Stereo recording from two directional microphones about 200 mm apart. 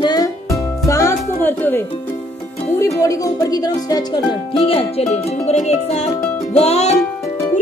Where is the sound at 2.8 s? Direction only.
15° left (ahead or behind); by 6.0 s 35° left (ahead or behind).